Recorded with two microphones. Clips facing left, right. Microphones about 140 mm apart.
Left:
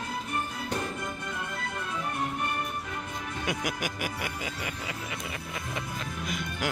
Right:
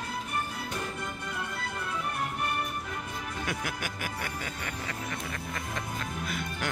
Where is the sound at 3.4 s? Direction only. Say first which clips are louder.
Left 5 dB; 15° left (ahead or behind).